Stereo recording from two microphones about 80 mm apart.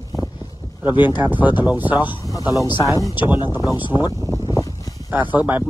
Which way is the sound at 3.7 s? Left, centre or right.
Left.